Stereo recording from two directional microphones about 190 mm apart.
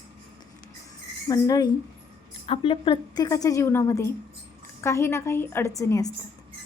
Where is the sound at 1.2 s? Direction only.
20° left (ahead or behind).